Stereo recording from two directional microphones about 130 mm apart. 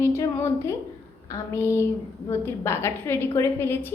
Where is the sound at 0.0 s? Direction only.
20° left (ahead or behind).